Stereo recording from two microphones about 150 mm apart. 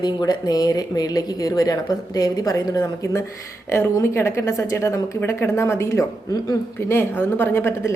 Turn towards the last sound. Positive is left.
turn(degrees=15)  # may be behind; listen again after turning